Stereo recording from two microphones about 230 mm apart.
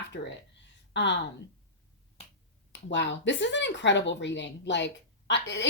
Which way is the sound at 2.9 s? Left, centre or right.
Left.